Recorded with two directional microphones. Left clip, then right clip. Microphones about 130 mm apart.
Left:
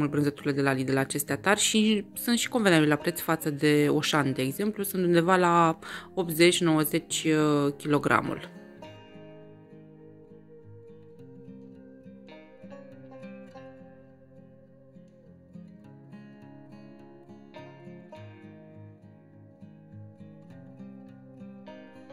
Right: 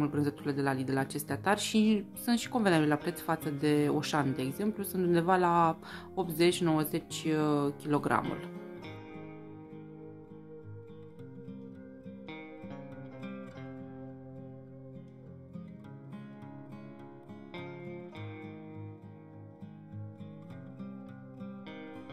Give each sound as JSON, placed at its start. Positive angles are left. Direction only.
{"t": 0.1, "sound": "speech", "side_deg": 15}